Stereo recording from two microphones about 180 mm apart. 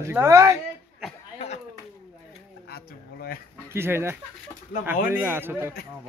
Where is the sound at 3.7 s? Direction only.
15° right (ahead or behind).